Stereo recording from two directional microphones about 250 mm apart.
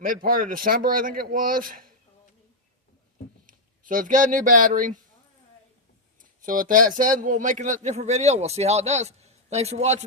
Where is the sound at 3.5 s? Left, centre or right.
Right.